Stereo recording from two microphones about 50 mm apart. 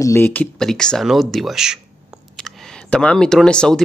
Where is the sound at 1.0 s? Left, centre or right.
Centre.